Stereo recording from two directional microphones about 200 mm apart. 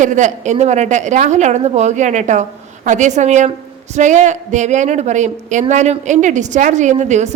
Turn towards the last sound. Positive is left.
turn(degrees=-35)  # may be behind; listen again after turning